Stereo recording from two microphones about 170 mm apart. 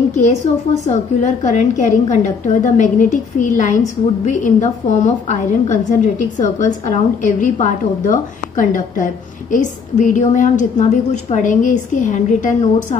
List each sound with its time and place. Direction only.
0.8 s a woman's voice: 45° left (ahead or behind)